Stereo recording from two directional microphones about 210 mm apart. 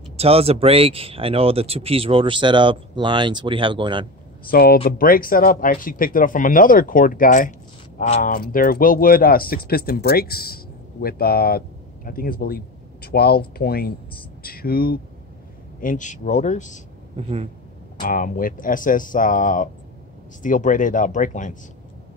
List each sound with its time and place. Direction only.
0.2 s speech: 30° right (ahead or behind)
4.5 s speech: 45° left (ahead or behind)
17.2 s speech: 30° right (ahead or behind)
18.0 s speech: 40° left (ahead or behind)